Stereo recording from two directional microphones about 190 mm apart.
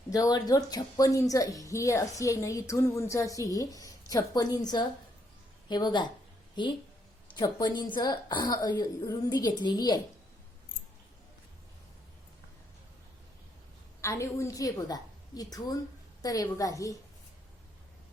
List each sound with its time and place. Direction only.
0.1 s a woman's voice: 20° left (ahead or behind)
14.0 s a woman's voice: 15° left (ahead or behind)